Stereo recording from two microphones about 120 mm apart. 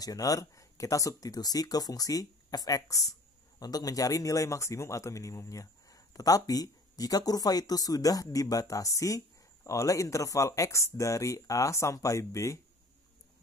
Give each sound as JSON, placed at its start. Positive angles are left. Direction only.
{"t": 0.0, "sound": "speech", "side_deg": 30}